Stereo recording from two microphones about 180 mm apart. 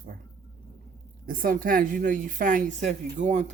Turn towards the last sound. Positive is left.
turn(degrees=-40)  # may be behind; listen again after turning